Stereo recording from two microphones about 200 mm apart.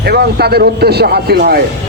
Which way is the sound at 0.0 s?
55° right (ahead or behind).